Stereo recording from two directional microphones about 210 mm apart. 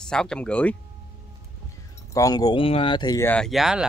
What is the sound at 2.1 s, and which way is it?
Speech, 15° left (ahead or behind).